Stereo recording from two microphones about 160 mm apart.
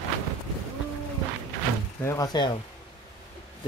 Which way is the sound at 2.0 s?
20° left (ahead or behind).